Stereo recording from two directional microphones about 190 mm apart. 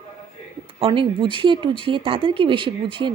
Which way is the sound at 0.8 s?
30° right (ahead or behind).